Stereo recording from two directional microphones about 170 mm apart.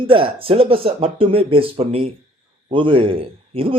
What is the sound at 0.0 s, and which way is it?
A man's voice, 30° right (ahead or behind).